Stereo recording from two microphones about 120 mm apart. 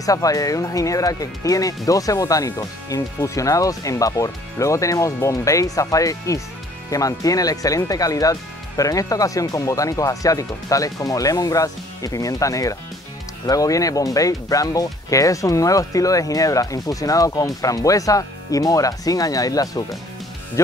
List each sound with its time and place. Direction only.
0.0 s speech: 30° left (ahead or behind)